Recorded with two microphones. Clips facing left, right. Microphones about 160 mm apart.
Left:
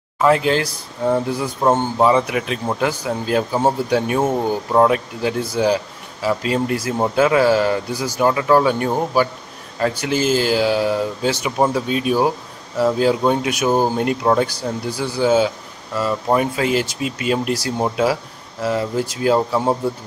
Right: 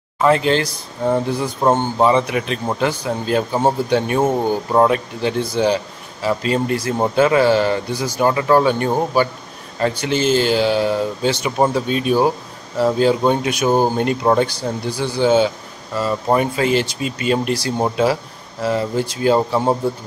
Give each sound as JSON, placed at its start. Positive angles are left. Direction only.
{"t": 0.2, "sound": "speech", "side_deg": 5}
{"t": 1.8, "sound": "speech", "side_deg": 5}
{"t": 4.2, "sound": "speech", "side_deg": -5}
{"t": 4.5, "sound": "speech", "side_deg": 5}